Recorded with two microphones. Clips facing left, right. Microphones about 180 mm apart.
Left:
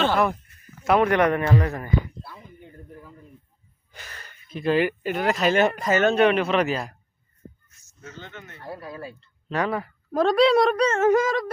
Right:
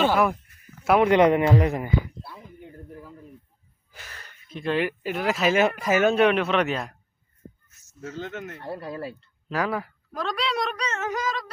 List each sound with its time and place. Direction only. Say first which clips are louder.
0.0 s speech: right 1 dB; 10° right (ahead or behind)
2.2 s a sound: right 1 dB; 5° right (ahead or behind)
3.9 s speech: left 1 dB; centre (ahead or behind)
7.7 s a sound: right 10 dB; 5° right (ahead or behind)
8.6 s speech: even; 25° right (ahead or behind)
9.2 s speech: left 3 dB; centre (ahead or behind)
10.1 s a woman's voice: left 11 dB; 50° left (ahead or behind)